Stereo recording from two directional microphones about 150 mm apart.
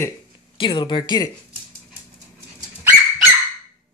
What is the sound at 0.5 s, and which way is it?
Speech, 30° left (ahead or behind).